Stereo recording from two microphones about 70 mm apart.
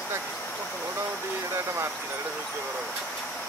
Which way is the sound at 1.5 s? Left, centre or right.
Right.